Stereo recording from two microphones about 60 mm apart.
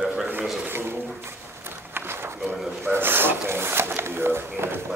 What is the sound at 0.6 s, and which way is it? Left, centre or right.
Speech, right.